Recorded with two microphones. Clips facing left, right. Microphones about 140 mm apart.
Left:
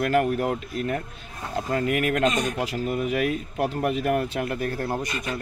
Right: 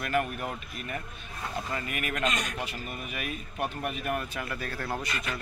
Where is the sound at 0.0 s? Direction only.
85° left.